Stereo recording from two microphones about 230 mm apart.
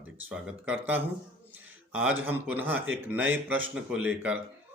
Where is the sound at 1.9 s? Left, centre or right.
Centre.